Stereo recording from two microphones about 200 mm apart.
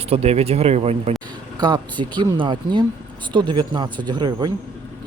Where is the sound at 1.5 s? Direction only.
20° right (ahead or behind).